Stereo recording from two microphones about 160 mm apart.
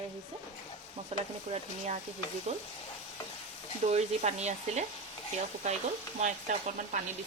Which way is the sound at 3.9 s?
45° right (ahead or behind).